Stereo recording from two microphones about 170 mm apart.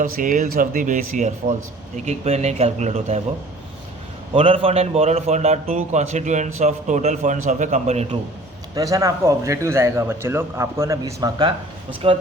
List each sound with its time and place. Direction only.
0.0 s a man's voice: 50° right (ahead or behind)
4.4 s a man's voice: 35° right (ahead or behind)
8.7 s a man's voice: 20° right (ahead or behind)
12.0 s a man's voice: 35° right (ahead or behind)